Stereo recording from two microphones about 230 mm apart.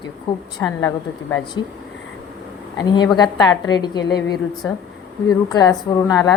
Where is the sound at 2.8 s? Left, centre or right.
Centre.